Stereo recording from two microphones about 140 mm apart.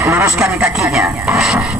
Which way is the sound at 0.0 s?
20° right (ahead or behind).